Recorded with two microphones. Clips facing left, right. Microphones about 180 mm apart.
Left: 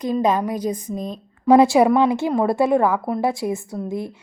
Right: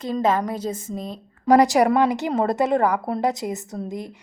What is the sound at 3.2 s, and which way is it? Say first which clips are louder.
Speech: left 2 dB; 20° right (ahead or behind).